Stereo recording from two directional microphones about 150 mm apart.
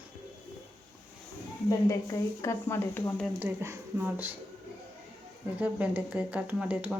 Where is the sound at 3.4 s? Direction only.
15° right (ahead or behind).